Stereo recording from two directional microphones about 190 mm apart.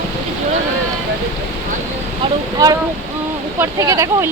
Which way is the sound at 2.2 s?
20° right (ahead or behind).